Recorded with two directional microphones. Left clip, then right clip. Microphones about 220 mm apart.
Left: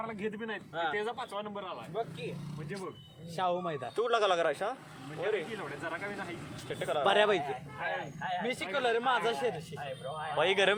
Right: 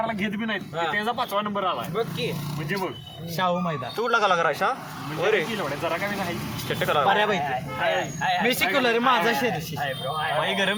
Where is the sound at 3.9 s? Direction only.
15° left (ahead or behind).